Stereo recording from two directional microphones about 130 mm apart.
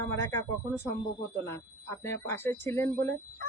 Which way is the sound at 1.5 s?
20° left (ahead or behind).